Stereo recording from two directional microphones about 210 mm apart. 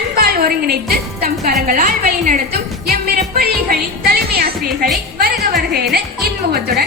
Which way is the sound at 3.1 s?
45° right (ahead or behind).